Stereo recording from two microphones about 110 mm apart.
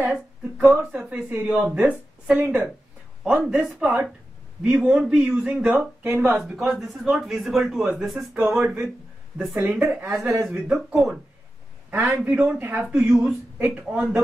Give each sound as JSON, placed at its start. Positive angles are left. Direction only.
{"t": 0.4, "sound": "speech", "side_deg": -10}
{"t": 6.0, "sound": "speech", "side_deg": -20}
{"t": 6.4, "sound": "speech", "side_deg": 0}
{"t": 9.8, "sound": "speech", "side_deg": -20}
{"t": 10.7, "sound": "speech", "side_deg": -5}
{"t": 11.9, "sound": "a man's voice", "side_deg": -15}